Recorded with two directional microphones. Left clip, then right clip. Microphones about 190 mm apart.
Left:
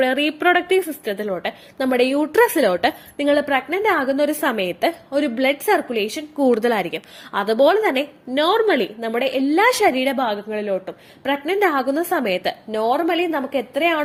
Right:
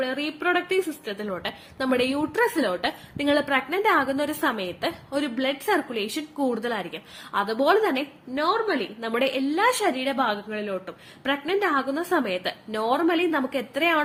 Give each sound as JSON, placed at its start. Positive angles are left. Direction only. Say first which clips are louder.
{"t": 0.0, "sound": "a woman's voice", "louder": "left 9 dB", "side_deg": 30}